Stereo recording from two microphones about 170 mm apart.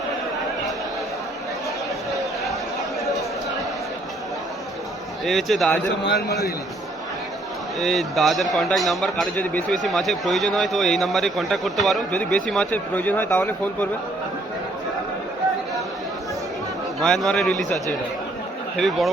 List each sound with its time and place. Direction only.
5.2 s a man's voice: centre (ahead or behind)
6.1 s a man's voice: 70° left (ahead or behind)
7.8 s a man's voice: centre (ahead or behind)
17.0 s a man's voice: centre (ahead or behind)
18.8 s a man's voice: centre (ahead or behind)